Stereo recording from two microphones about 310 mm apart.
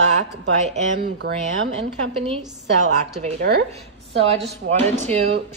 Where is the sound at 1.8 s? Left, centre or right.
Centre.